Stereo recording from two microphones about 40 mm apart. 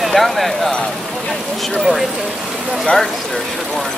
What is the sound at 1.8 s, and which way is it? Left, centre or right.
Speech, centre.